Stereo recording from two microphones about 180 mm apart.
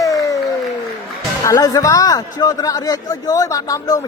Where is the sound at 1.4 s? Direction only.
20° left (ahead or behind).